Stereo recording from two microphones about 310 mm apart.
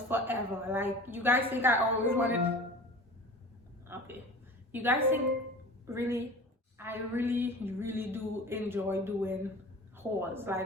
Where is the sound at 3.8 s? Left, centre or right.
Centre.